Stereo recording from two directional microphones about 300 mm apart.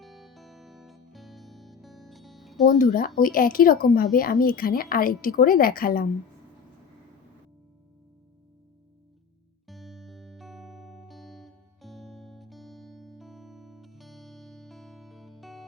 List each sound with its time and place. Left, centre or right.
0.0 s music: centre
2.7 s a woman's voice: left
9.6 s music: centre